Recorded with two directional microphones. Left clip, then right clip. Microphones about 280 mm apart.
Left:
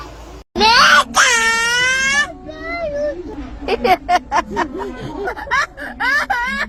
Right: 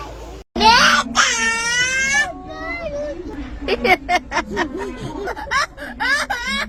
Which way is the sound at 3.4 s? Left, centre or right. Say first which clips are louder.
Left 2 dB; centre.